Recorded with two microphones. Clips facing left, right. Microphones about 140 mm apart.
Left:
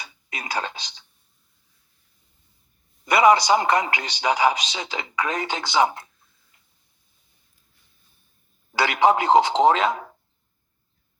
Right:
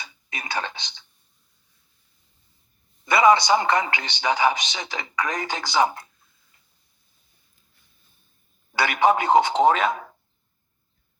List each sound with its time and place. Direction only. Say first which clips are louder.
0.3 s whispering: left 1 dB; 30° left (ahead or behind)
3.2 s speech: left 1 dB; 25° left (ahead or behind)
8.8 s speech: left 1 dB; 25° left (ahead or behind)